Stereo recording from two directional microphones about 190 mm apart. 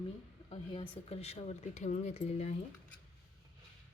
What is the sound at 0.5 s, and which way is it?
Speech, 30° left (ahead or behind).